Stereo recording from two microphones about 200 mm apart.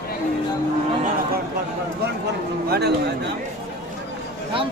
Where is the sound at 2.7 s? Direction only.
55° right (ahead or behind).